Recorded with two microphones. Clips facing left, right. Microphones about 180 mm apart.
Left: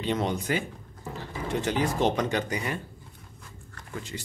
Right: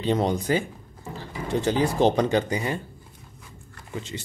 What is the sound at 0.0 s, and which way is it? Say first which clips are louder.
Speech: right 4 dB; 35° right (ahead or behind).